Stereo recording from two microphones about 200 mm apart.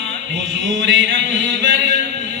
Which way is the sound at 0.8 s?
70° right (ahead or behind).